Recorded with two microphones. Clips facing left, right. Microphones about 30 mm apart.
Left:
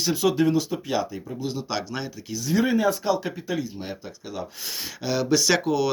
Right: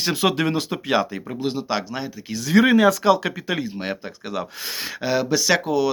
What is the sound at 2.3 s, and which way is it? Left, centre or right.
Speech, right.